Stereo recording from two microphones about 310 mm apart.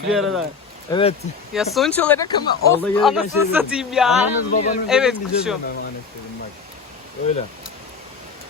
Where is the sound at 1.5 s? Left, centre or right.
Centre.